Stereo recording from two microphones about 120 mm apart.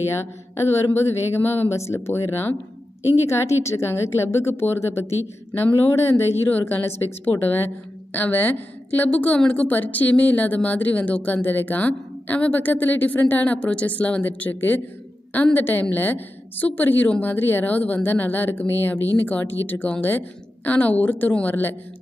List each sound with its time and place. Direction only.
0.1 s a woman's voice: 20° left (ahead or behind)